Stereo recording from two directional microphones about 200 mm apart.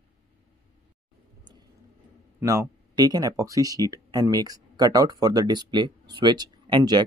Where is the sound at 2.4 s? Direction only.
15° right (ahead or behind).